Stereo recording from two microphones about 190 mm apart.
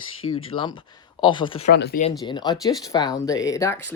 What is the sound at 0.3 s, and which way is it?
Speech, 25° left (ahead or behind).